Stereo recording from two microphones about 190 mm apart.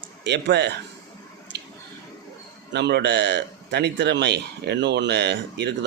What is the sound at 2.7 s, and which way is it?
A man's voice, 60° right (ahead or behind).